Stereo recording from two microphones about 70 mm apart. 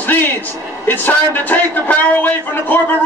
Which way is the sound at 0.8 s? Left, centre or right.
Left.